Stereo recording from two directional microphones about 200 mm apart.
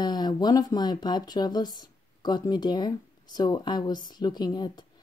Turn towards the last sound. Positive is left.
turn(degrees=20)  # may be behind; listen again after turning